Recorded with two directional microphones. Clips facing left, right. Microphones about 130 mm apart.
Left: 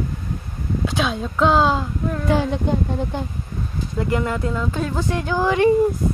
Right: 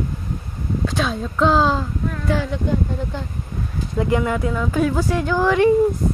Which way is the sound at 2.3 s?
20° left (ahead or behind).